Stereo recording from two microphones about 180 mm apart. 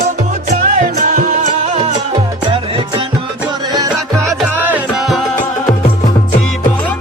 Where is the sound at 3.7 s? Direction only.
20° right (ahead or behind).